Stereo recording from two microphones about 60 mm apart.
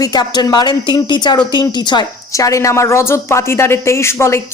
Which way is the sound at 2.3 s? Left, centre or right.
Left.